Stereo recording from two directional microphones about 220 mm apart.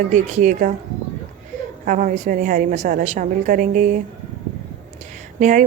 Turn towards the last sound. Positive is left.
turn(degrees=-35)  # may be behind; listen again after turning